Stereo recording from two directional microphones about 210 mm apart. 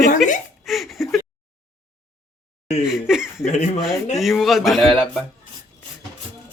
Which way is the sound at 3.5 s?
35° left (ahead or behind).